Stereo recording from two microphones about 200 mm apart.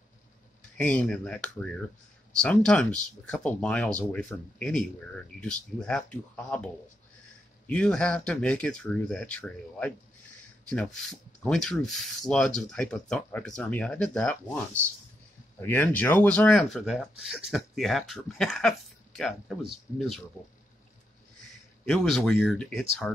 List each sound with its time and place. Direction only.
0.7 s speech: 5° left (ahead or behind)
15.6 s speech: 10° left (ahead or behind)
21.8 s speech: centre (ahead or behind)